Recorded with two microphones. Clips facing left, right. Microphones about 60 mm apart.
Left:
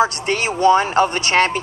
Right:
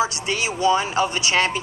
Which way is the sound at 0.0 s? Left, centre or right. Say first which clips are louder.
Left 5 dB; left.